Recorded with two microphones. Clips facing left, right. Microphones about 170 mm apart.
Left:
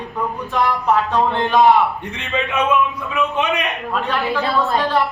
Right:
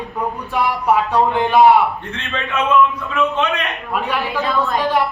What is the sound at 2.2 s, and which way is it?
A man's voice, 15° left (ahead or behind).